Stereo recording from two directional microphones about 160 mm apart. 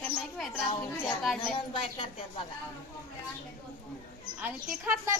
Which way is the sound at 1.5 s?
35° left (ahead or behind).